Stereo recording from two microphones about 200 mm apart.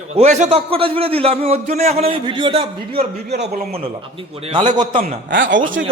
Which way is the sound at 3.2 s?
55° right (ahead or behind).